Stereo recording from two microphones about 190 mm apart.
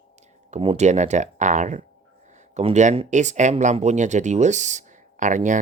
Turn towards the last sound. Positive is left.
turn(degrees=-40)  # may be behind; listen again after turning